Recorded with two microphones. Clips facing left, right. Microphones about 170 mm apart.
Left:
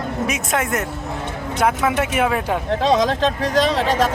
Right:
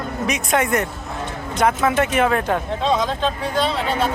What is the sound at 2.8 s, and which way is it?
Speech, 90° left.